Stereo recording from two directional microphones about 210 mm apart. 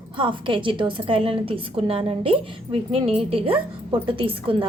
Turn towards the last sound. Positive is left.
turn(degrees=-25)  # may be behind; listen again after turning